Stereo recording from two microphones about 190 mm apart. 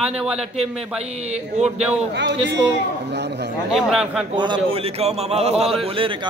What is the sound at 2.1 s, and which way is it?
A man's voice, 65° right (ahead or behind).